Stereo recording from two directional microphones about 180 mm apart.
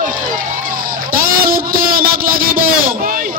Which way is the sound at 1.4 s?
55° right (ahead or behind).